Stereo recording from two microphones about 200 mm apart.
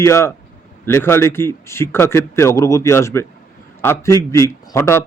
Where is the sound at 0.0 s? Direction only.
15° left (ahead or behind).